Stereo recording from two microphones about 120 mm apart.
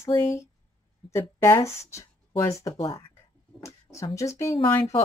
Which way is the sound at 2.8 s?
50° left (ahead or behind).